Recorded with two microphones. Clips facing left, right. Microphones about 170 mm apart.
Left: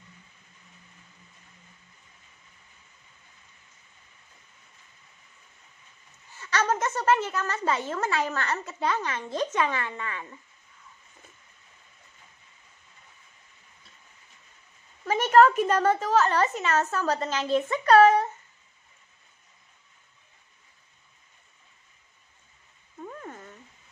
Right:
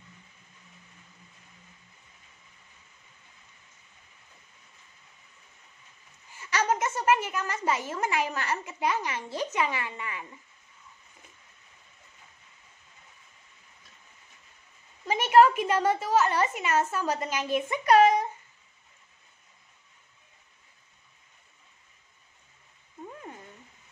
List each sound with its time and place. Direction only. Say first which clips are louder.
6.3 s a woman's voice: left 1 dB; 10° right (ahead or behind)
15.0 s a woman's voice: left 1 dB; 10° right (ahead or behind)